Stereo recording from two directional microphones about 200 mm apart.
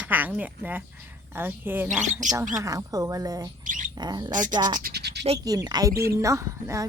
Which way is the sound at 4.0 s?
20° right (ahead or behind).